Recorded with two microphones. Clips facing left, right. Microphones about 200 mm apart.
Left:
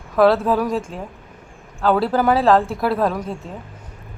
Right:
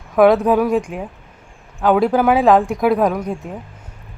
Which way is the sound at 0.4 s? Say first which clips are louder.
Right 4 dB; 15° right (ahead or behind).